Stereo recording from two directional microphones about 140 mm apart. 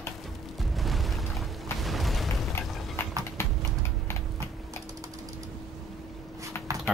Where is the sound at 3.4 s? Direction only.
20° left (ahead or behind).